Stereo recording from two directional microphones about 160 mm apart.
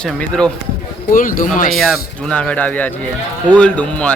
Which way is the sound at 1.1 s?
60° left (ahead or behind).